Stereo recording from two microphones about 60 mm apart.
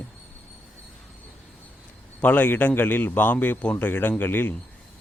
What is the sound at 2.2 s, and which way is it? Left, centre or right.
A man's voice, left.